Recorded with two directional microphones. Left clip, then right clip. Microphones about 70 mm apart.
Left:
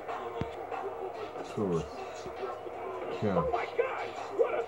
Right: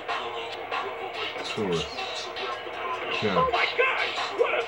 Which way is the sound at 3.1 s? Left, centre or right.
Centre.